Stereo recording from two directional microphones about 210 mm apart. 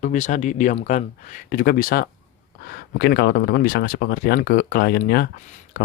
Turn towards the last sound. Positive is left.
turn(degrees=45)  # may be behind; listen again after turning